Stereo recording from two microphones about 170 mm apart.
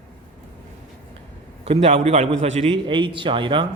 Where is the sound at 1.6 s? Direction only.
35° right (ahead or behind).